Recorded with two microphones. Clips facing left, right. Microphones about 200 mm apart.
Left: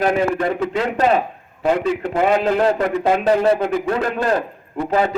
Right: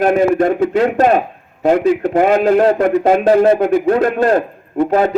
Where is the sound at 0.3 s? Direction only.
50° right (ahead or behind).